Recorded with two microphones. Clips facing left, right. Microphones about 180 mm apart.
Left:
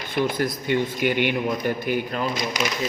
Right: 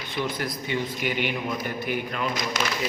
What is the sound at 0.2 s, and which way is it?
A man's voice, 50° left (ahead or behind).